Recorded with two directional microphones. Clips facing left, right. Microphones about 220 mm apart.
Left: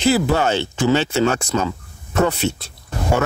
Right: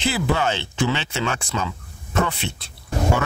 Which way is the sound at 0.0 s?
40° left (ahead or behind).